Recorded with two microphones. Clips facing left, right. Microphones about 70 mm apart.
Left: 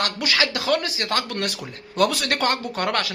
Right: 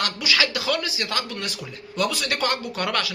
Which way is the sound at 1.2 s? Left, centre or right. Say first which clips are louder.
Left 4 dB; left.